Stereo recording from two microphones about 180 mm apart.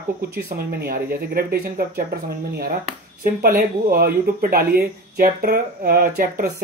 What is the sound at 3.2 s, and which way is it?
Speech, 50° right (ahead or behind).